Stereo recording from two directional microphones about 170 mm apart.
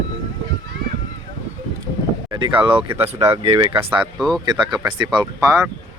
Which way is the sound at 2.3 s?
30° right (ahead or behind).